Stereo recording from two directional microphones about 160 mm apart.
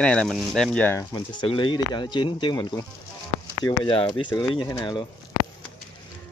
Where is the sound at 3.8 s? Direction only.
30° left (ahead or behind).